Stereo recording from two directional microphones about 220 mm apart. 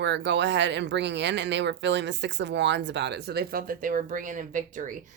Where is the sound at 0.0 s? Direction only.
55° right (ahead or behind).